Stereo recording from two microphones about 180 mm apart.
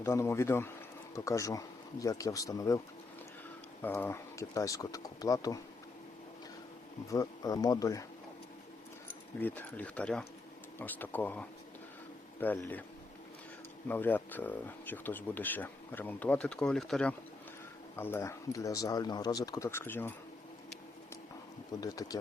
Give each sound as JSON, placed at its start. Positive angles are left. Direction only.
{"t": 0.0, "sound": "speech", "side_deg": 15}
{"t": 7.1, "sound": "speech", "side_deg": 20}
{"t": 9.4, "sound": "speech", "side_deg": 10}
{"t": 13.8, "sound": "speech", "side_deg": 10}
{"t": 21.8, "sound": "speech", "side_deg": 20}